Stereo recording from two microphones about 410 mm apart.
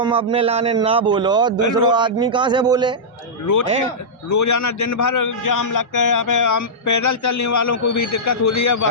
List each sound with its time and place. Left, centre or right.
0.0 s a man's voice: centre
3.4 s a man's voice: left